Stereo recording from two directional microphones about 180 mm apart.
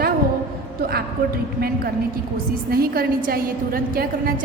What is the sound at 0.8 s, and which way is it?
A woman's voice, 60° right (ahead or behind).